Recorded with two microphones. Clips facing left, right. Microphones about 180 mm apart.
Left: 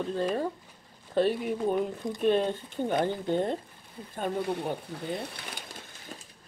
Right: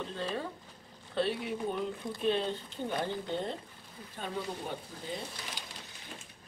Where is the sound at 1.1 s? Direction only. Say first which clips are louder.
Left 6 dB; 45° left (ahead or behind).